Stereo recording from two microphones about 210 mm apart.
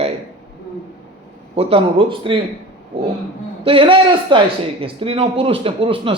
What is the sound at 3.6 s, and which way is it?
Speech, 25° right (ahead or behind).